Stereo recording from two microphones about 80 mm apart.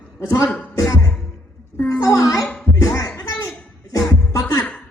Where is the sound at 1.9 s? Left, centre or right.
Left.